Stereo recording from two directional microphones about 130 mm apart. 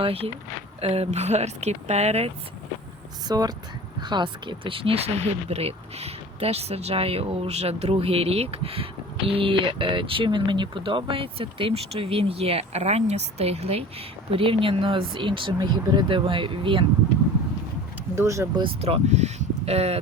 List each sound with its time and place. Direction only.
0.0 s speech: 50° right (ahead or behind)
3.2 s speech: 30° right (ahead or behind)
18.1 s speech: 20° right (ahead or behind)
18.6 s speech: 50° right (ahead or behind)